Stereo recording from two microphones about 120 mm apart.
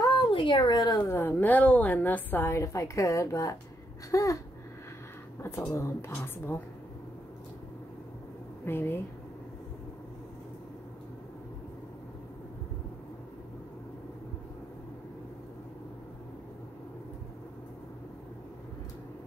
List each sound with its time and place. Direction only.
0.0 s a sound: 35° left (ahead or behind)
0.3 s speech: 45° left (ahead or behind)
1.0 s a woman's voice: 20° left (ahead or behind)
4.1 s a sound: 25° left (ahead or behind)
5.4 s a woman's voice: 25° left (ahead or behind)
8.6 s a woman's voice: 20° left (ahead or behind)